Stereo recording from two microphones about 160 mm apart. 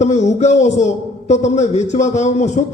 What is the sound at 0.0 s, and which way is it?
A man's voice, 45° left (ahead or behind).